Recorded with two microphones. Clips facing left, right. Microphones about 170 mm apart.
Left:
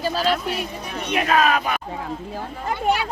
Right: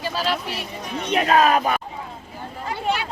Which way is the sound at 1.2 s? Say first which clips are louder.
Right 2 dB; 35° right (ahead or behind).